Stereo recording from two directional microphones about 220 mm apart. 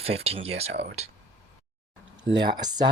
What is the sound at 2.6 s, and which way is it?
Speech, 20° right (ahead or behind).